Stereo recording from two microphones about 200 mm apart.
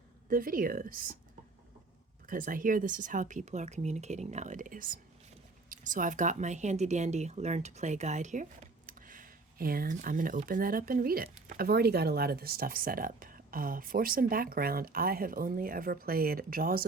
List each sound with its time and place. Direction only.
0.3 s speech: 45° right (ahead or behind)
2.2 s speech: 45° right (ahead or behind)